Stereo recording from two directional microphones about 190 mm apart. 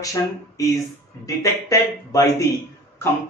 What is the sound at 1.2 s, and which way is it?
Speech, 15° left (ahead or behind).